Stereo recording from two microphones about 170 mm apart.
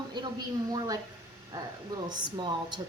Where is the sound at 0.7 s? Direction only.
20° right (ahead or behind).